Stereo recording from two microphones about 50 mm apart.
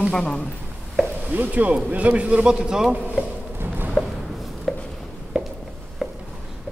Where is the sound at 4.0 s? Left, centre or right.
Left.